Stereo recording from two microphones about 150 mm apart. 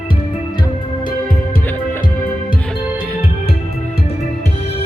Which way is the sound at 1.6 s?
10° left (ahead or behind).